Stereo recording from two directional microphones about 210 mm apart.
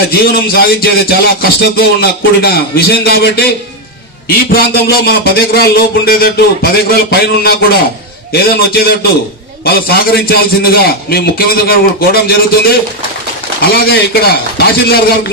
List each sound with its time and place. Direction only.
0.1 s music: 45° left (ahead or behind)